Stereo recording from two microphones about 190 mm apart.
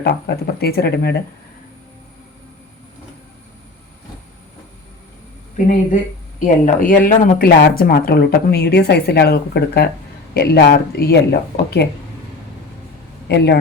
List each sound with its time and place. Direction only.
0.0 s speech: 60° left (ahead or behind)
5.5 s speech: 45° left (ahead or behind)
13.2 s speech: 65° left (ahead or behind)